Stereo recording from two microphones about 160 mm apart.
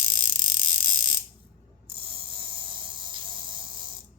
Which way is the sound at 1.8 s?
35° right (ahead or behind).